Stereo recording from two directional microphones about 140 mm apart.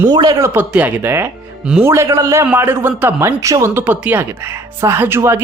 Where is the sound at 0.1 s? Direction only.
30° right (ahead or behind).